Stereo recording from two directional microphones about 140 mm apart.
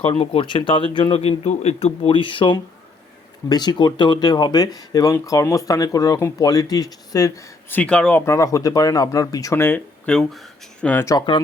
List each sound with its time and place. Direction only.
0.1 s speech: 45° left (ahead or behind); by 7.4 s 25° left (ahead or behind)
7.7 s speech: 10° left (ahead or behind)
8.3 s speech: 25° left (ahead or behind)